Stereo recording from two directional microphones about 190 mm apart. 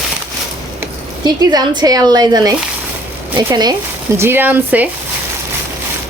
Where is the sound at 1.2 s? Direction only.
20° right (ahead or behind).